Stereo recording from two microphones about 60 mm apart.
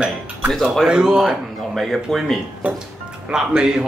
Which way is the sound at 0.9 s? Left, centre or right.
Centre.